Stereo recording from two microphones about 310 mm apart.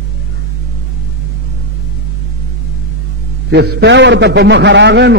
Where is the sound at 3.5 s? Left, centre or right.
Right.